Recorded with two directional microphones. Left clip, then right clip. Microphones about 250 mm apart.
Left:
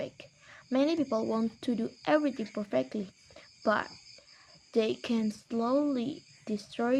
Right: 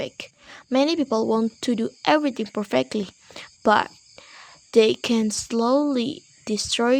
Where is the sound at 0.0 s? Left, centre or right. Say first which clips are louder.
Right 8 dB; right.